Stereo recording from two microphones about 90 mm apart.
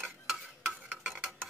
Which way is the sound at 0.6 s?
15° right (ahead or behind).